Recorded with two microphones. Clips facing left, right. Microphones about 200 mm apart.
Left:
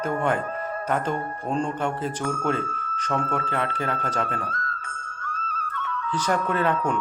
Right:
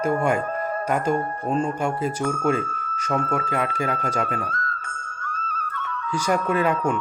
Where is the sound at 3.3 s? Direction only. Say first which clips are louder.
Right 2 dB; 10° right (ahead or behind).